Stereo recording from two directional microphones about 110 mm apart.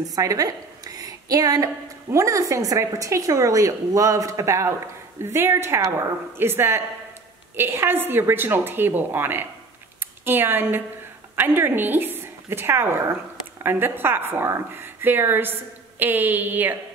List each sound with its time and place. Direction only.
0.1 s a woman's voice: 30° right (ahead or behind)